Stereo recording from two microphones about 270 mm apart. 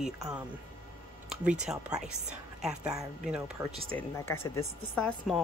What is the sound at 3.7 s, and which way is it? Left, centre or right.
Speech, right.